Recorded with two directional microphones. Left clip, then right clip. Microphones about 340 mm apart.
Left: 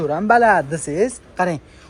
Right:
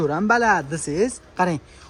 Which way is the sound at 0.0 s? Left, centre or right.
Centre.